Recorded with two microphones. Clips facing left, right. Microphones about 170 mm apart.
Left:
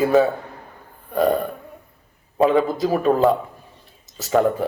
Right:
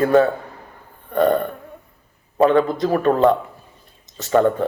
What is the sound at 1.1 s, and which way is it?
Burping, 5° left (ahead or behind).